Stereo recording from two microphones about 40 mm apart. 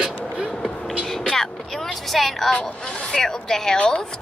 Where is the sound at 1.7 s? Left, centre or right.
Centre.